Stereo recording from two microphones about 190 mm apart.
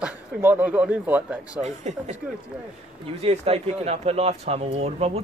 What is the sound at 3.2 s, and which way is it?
A man's voice, 30° right (ahead or behind).